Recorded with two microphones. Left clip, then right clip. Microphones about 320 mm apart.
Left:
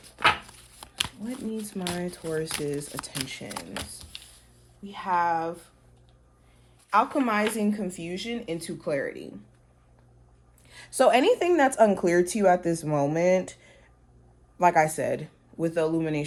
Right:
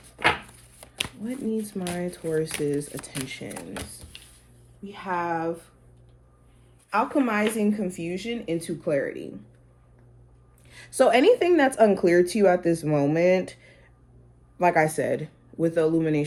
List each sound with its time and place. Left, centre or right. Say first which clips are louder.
0.8 s a sound: left 1 dB; centre
1.2 s speech: right 5 dB; left
2.9 s speech: left 1 dB; centre
3.2 s speech: right 1 dB; left
4.8 s speech: left 3 dB; left
6.9 s speech: left 1 dB; left
10.7 s speech: right 1 dB; left
13.1 s speech: right 1 dB; left